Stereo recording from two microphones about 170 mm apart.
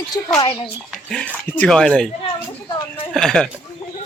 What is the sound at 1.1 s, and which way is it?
Speech, 5° left (ahead or behind).